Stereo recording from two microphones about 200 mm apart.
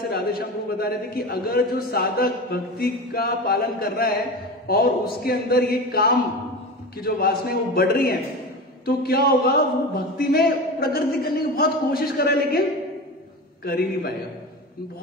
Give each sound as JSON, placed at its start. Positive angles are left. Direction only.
{"t": 0.1, "sound": "a man's voice", "side_deg": 50}
{"t": 13.7, "sound": "a man's voice", "side_deg": 50}